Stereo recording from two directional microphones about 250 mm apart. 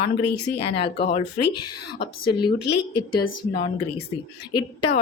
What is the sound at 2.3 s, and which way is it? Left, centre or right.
Speech, centre.